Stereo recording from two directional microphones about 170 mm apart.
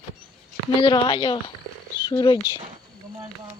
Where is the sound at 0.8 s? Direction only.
30° left (ahead or behind).